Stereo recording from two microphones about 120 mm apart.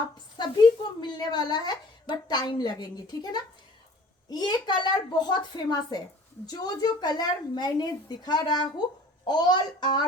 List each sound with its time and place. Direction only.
0.3 s a woman's voice: 35° left (ahead or behind)